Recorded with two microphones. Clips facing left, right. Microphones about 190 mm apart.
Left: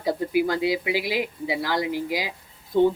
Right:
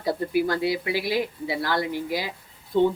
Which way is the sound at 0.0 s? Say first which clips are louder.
Left 1 dB; 15° left (ahead or behind).